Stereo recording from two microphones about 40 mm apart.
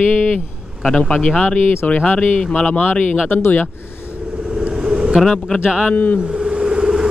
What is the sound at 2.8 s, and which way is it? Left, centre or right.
Speech, left.